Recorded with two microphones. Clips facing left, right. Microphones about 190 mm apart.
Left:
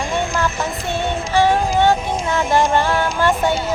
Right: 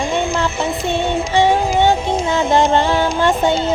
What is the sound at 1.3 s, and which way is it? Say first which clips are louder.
Music: right 1 dB; 20° right (ahead or behind).